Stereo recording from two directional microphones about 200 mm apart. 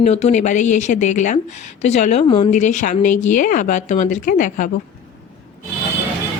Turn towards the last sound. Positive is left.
turn(degrees=40)  # may be behind; listen again after turning